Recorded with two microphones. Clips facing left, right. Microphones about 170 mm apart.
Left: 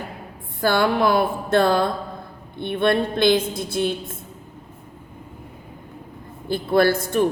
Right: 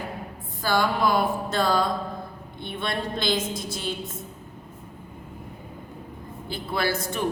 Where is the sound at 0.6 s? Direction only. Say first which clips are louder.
Left 5 dB; 60° left (ahead or behind).